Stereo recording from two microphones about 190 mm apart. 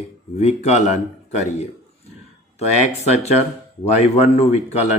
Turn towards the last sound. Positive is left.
turn(degrees=35)  # may be behind; listen again after turning